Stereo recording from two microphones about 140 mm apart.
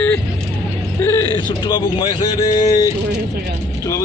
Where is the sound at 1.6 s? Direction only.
30° left (ahead or behind).